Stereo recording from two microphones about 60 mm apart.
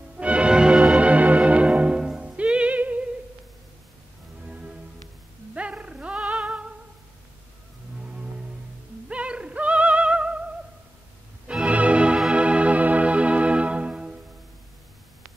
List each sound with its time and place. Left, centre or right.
0.2 s music: centre
4.5 s music: centre
9.1 s music: centre
11.7 s organ: right